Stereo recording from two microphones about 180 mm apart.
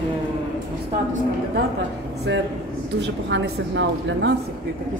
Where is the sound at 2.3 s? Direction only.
75° right (ahead or behind).